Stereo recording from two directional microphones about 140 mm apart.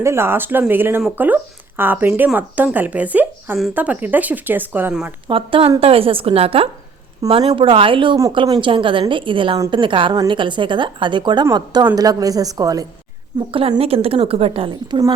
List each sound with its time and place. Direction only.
0.0 s speech: 20° right (ahead or behind)
5.3 s a woman's voice: 40° right (ahead or behind)
13.5 s a woman's voice: 40° right (ahead or behind)
14.7 s a woman's voice: 30° right (ahead or behind)